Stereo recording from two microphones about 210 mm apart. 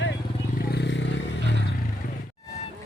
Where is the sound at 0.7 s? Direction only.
55° left (ahead or behind).